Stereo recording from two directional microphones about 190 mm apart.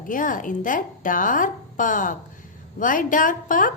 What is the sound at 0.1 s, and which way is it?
A woman's voice, 45° left (ahead or behind).